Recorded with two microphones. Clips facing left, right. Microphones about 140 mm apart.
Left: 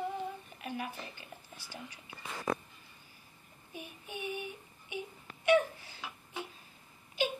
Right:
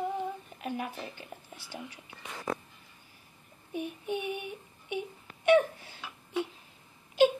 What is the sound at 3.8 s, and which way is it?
Speech, 55° right (ahead or behind).